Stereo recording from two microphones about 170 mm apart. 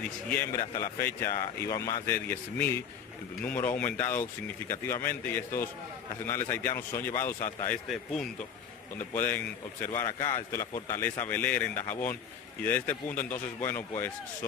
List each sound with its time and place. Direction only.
0.3 s a man's voice: 10° left (ahead or behind)
0.6 s a man's voice: 20° left (ahead or behind)
7.9 s speech: centre (ahead or behind)
9.1 s a man's voice: 10° left (ahead or behind)